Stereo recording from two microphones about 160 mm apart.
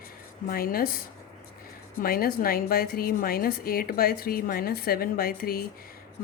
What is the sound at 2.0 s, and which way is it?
A woman's voice, 70° left (ahead or behind).